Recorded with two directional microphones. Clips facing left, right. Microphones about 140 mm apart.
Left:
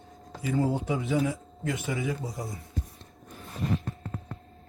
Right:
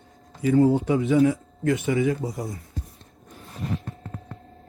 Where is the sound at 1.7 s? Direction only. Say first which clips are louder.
Right 9 dB; 55° right (ahead or behind).